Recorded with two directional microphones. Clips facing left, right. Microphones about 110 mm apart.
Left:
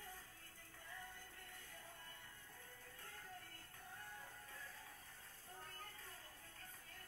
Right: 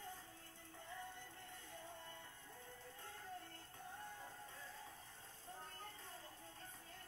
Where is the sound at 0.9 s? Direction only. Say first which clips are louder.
Right 4 dB; 25° right (ahead or behind).